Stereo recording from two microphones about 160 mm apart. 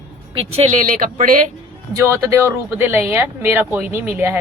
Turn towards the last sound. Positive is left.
turn(degrees=-15)  # may be behind; listen again after turning